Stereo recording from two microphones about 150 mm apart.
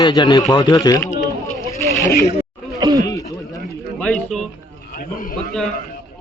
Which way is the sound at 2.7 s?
25° right (ahead or behind).